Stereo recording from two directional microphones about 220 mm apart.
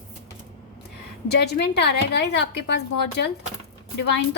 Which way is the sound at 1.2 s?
50° left (ahead or behind).